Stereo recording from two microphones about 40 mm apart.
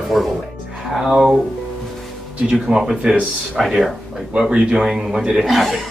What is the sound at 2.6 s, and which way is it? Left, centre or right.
A woman's voice, centre.